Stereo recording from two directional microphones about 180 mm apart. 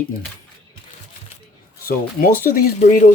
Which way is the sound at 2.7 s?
45° left (ahead or behind).